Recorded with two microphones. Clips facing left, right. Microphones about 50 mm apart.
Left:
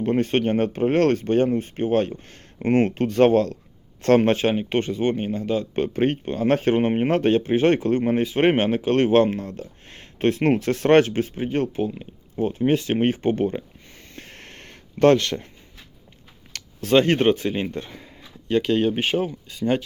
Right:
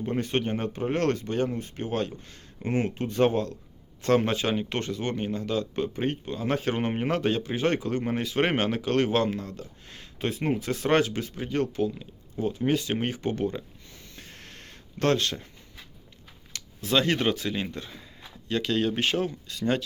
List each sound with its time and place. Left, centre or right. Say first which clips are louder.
0.0 s speech: left 7 dB; left
4.0 s speech: left 6 dB; left
4.5 s speech: left 6 dB; left
5.8 s speech: left 7 dB; left
6.7 s speech: left 7 dB; left
14.2 s a sound: left 5 dB; left
16.5 s speech: left 8 dB; left
18.4 s speech: left 6 dB; left